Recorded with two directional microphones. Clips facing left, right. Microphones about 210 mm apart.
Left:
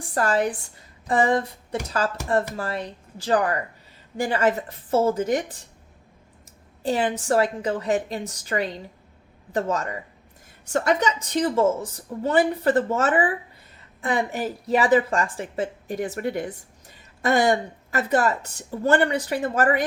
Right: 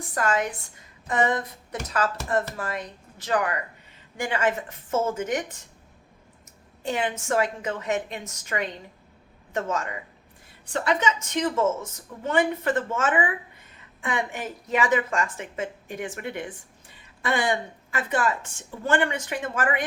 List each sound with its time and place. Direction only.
0.1 s speech: 35° left (ahead or behind)
1.0 s a sound: 30° left (ahead or behind)
2.6 s a woman's voice: 30° left (ahead or behind)
6.8 s a woman's voice: 35° left (ahead or behind)